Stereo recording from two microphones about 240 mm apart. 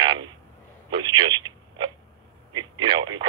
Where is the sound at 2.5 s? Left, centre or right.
Centre.